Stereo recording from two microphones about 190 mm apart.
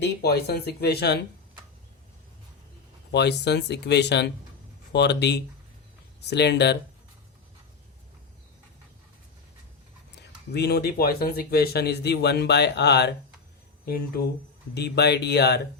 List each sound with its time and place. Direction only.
0.0 s speech: 60° left (ahead or behind)
3.1 s speech: 65° left (ahead or behind)
10.5 s speech: 60° left (ahead or behind)